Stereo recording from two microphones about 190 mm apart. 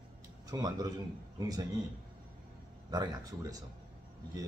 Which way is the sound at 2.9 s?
20° right (ahead or behind).